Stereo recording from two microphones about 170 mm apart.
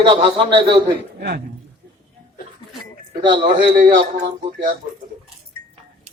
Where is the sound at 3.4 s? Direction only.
50° right (ahead or behind).